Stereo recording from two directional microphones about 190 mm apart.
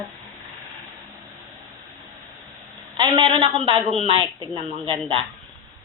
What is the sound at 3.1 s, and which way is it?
Speech, 25° right (ahead or behind).